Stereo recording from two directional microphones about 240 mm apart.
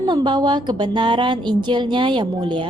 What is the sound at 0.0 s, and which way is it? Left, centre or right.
A woman's voice, centre.